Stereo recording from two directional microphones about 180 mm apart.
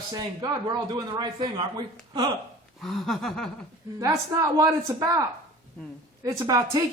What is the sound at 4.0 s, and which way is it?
A woman's voice, 20° right (ahead or behind).